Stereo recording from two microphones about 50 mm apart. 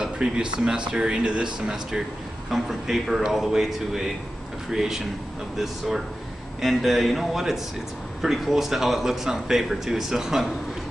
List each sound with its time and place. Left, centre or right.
0.0 s speech: centre
2.5 s speech: centre